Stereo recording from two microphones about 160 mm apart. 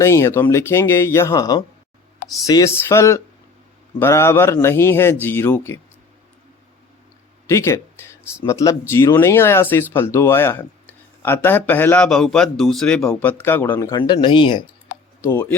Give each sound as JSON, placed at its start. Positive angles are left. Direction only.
{"t": 0.0, "sound": "speech", "side_deg": 15}
{"t": 7.4, "sound": "speech", "side_deg": 20}
{"t": 13.9, "sound": "speech", "side_deg": 30}
{"t": 15.2, "sound": "speech", "side_deg": 15}